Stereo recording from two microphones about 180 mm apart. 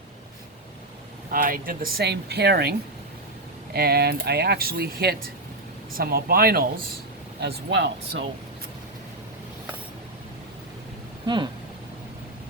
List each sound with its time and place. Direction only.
1.3 s speech: 50° right (ahead or behind)
7.3 s speech: 70° right (ahead or behind)